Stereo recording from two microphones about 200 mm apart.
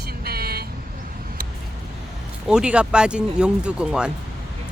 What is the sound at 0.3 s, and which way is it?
Vehicle, 50° right (ahead or behind).